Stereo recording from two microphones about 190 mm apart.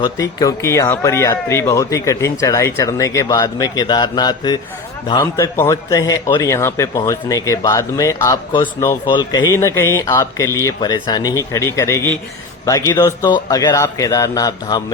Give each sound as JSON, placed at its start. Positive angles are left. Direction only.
{"t": 0.0, "sound": "a man's voice", "side_deg": 20}